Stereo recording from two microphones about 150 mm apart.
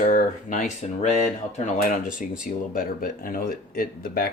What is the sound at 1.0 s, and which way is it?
Speech, 50° left (ahead or behind).